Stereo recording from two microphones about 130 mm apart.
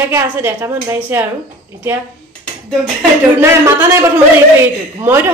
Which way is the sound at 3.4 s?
15° right (ahead or behind).